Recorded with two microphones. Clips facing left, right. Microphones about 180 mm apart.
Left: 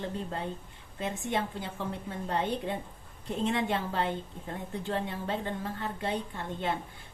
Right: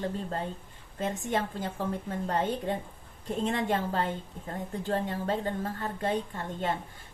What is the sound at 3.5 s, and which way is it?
A woman's voice, 45° right (ahead or behind).